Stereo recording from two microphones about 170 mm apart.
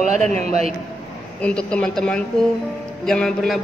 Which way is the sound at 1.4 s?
5° left (ahead or behind).